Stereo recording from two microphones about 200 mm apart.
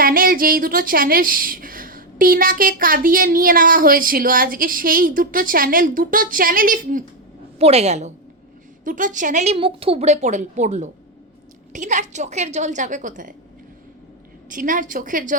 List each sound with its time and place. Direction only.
0.0 s a woman's voice: 45° right (ahead or behind)
7.6 s a woman's voice: 30° right (ahead or behind)
14.5 s a woman's voice: 40° right (ahead or behind)